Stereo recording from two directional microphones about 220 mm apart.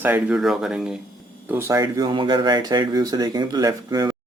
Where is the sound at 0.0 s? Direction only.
5° right (ahead or behind).